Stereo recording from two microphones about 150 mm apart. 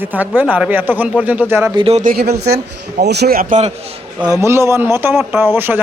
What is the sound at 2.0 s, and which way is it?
Speech, 80° right.